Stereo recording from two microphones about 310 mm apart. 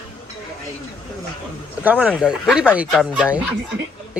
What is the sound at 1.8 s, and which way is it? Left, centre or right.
Speech, centre.